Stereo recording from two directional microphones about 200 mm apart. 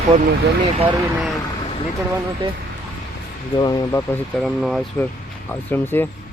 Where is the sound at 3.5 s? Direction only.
20° left (ahead or behind).